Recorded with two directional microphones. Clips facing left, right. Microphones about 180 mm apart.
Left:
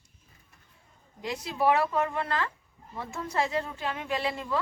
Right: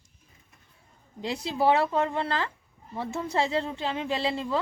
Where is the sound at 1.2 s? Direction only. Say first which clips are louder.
Right 2 dB; 30° right (ahead or behind).